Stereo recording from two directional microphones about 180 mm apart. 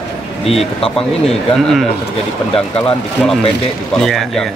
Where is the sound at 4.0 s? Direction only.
Centre (ahead or behind).